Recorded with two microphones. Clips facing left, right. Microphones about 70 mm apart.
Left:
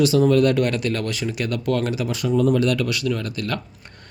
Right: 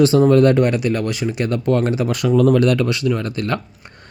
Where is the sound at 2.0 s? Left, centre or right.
Right.